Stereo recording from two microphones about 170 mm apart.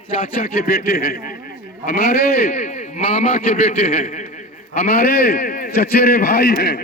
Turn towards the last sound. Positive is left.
turn(degrees=65)  # may be behind; listen again after turning